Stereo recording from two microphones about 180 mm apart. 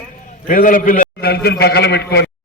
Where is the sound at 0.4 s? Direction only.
50° left (ahead or behind).